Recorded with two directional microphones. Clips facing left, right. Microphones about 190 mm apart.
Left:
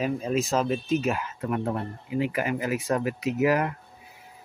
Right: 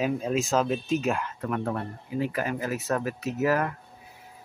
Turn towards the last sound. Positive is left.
turn(degrees=15)  # may be behind; listen again after turning